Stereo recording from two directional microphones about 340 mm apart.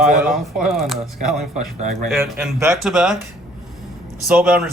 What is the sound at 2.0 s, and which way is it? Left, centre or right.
A man's voice, centre.